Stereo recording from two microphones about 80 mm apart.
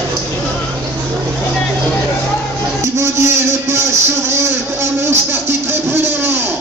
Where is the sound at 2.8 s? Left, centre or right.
Right.